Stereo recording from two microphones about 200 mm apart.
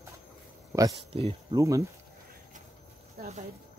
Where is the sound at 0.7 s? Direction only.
15° right (ahead or behind).